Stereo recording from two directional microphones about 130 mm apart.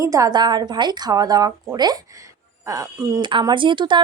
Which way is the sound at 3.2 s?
35° right (ahead or behind).